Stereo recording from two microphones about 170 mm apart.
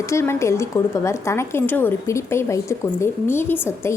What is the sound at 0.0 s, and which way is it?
A woman's voice, 15° left (ahead or behind).